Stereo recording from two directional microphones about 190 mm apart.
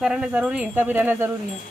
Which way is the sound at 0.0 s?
5° right (ahead or behind).